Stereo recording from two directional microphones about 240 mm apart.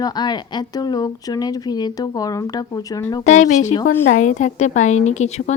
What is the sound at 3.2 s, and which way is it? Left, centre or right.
Speech, left.